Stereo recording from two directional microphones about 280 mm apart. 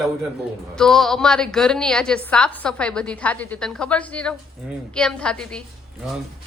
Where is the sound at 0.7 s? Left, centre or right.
Centre.